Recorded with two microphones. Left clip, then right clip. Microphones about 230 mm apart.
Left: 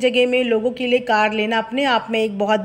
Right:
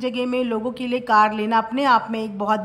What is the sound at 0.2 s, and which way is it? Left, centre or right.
Speech, right.